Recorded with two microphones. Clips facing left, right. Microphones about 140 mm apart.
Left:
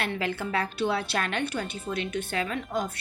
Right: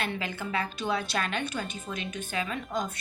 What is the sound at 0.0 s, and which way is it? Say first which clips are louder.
Speech: left 3 dB; 65° left (ahead or behind).